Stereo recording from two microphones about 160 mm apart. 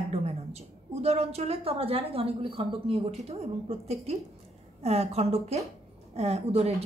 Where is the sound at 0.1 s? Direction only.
40° right (ahead or behind).